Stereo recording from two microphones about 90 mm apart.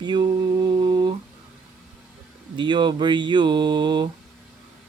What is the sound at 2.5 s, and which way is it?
Speech, 60° right (ahead or behind).